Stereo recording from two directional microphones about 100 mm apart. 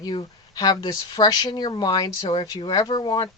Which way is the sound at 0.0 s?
45° left (ahead or behind).